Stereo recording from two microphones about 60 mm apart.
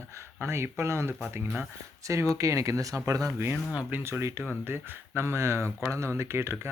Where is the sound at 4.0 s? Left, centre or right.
Right.